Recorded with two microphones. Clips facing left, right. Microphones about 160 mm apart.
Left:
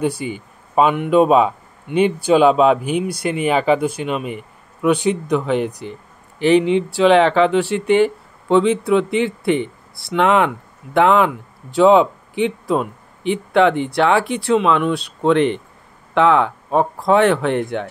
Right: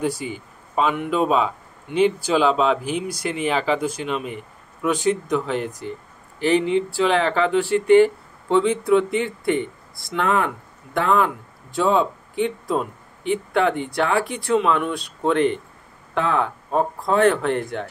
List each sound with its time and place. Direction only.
0.0 s a man's voice: 65° left (ahead or behind)
6.4 s speech: 80° left